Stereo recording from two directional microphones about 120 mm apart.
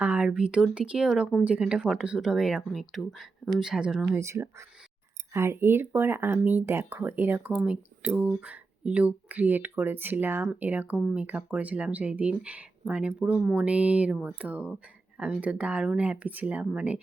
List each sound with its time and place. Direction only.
0.0 s a sound: 15° right (ahead or behind)
0.3 s speech: 10° right (ahead or behind)
4.2 s speech: 25° right (ahead or behind)